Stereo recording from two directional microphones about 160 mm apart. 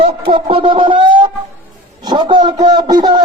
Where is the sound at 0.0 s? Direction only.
35° right (ahead or behind).